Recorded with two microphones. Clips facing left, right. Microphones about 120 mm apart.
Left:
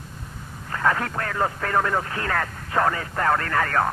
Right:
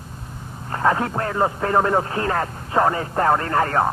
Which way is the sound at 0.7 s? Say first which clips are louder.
Right 4 dB; 25° right (ahead or behind).